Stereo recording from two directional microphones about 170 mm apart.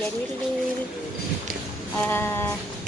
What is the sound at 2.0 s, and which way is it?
Speech, 15° left (ahead or behind).